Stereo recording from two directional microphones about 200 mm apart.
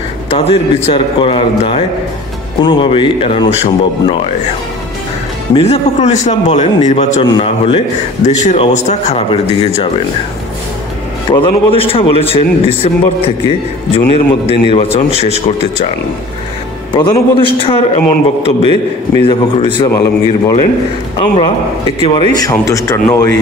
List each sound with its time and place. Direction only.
0.3 s a man's voice: 30° left (ahead or behind)
5.5 s a man's voice: 30° left (ahead or behind)
11.4 s a man's voice: 30° left (ahead or behind)
16.9 s a man's voice: 20° left (ahead or behind)
18.4 s a man's voice: 30° right (ahead or behind)
19.2 s a man's voice: 25° left (ahead or behind)